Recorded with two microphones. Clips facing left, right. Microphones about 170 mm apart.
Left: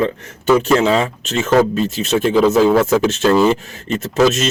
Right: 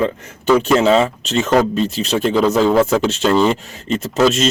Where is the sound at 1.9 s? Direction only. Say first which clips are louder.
Left 4 dB; centre (ahead or behind).